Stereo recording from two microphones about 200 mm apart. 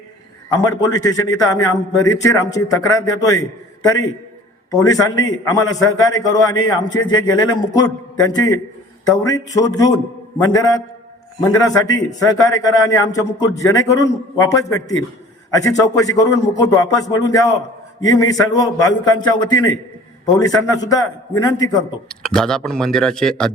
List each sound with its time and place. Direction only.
0.8 s a man's voice: 20° left (ahead or behind)
4.7 s a man's voice: 20° left (ahead or behind)
22.1 s speech: 5° left (ahead or behind)